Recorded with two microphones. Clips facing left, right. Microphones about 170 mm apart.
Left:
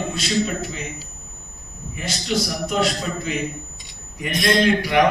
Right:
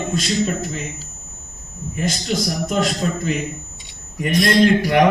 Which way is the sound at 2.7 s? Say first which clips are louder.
Right 2 dB; 45° right (ahead or behind).